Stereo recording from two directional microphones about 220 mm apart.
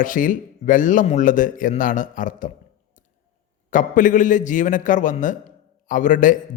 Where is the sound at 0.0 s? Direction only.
35° left (ahead or behind).